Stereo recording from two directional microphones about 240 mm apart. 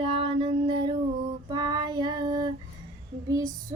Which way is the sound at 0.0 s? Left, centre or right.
Right.